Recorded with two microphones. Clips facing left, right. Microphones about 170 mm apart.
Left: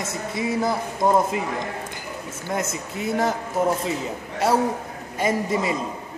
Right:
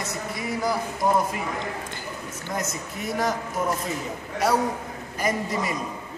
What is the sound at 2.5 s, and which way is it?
Speech, 25° left (ahead or behind).